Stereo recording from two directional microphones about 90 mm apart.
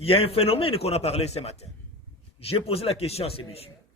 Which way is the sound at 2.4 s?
90° left.